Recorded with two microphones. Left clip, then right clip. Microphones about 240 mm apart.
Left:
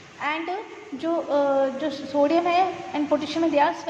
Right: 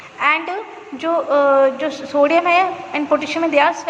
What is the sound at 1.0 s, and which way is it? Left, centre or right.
A woman's voice, centre.